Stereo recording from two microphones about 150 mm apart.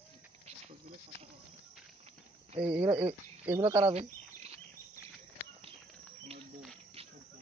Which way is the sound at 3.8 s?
45° right (ahead or behind).